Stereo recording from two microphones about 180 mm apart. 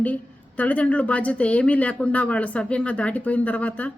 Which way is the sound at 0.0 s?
10° left (ahead or behind).